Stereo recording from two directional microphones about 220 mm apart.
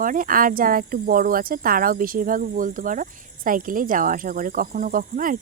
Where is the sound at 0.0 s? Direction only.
40° right (ahead or behind).